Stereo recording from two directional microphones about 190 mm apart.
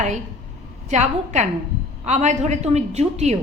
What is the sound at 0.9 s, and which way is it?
A woman's voice, 40° right (ahead or behind).